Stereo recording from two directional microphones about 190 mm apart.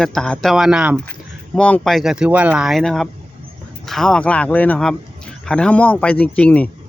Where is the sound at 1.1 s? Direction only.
5° left (ahead or behind).